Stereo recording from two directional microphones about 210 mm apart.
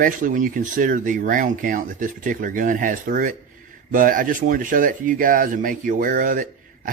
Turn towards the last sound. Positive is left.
turn(degrees=-40)  # may be behind; listen again after turning